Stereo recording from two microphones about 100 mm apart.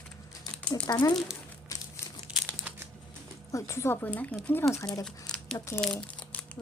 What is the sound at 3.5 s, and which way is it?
Speech, 30° left (ahead or behind).